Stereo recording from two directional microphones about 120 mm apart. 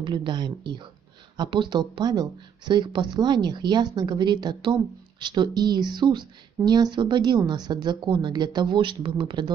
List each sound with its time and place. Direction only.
0.0 s a woman's voice: 40° right (ahead or behind)